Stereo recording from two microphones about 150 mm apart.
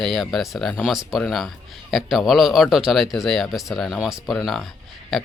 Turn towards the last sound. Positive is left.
turn(degrees=0)  # may be behind; listen again after turning